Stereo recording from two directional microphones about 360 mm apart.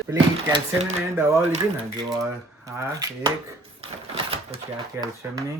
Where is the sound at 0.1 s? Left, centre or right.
Centre.